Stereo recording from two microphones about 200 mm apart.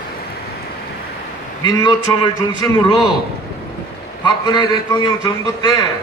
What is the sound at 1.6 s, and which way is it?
A man's voice, 20° left (ahead or behind).